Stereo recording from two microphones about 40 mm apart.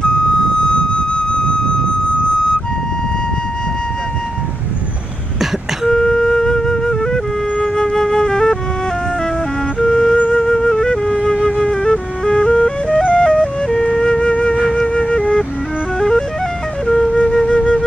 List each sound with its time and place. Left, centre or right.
0.6 s flute: left
5.9 s flute: centre
9.8 s music: centre
10.3 s flute: centre
11.4 s music: centre
13.8 s flute: centre
16.0 s music: centre
16.8 s flute: centre